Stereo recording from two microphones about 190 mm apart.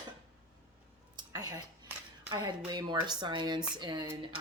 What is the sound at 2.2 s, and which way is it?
Speech, 20° right (ahead or behind).